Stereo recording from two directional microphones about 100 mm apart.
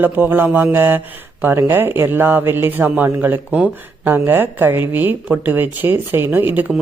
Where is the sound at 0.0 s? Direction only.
20° right (ahead or behind).